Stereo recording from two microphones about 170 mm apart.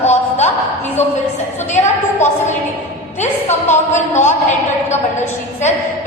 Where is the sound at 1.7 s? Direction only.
40° left (ahead or behind).